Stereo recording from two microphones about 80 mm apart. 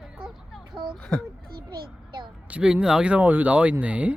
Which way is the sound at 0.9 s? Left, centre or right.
Centre.